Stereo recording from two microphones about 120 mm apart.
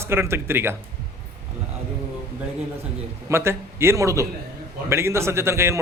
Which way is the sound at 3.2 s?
20° right (ahead or behind).